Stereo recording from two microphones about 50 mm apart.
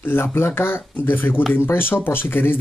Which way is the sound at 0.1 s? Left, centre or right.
Left.